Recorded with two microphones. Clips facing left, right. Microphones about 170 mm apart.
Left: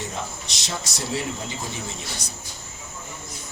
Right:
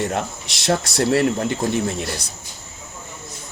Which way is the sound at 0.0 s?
70° right (ahead or behind).